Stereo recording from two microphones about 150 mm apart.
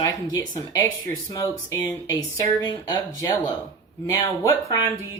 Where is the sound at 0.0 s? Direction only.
25° left (ahead or behind).